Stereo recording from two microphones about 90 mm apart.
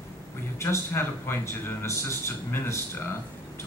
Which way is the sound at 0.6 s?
25° left (ahead or behind).